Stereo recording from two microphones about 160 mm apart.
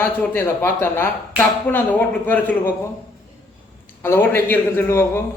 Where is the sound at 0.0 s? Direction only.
15° left (ahead or behind).